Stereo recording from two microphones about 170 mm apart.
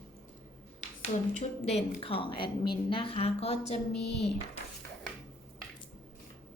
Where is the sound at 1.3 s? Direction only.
40° left (ahead or behind).